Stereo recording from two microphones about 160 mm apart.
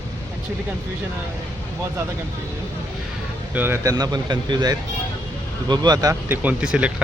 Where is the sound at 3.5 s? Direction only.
15° right (ahead or behind).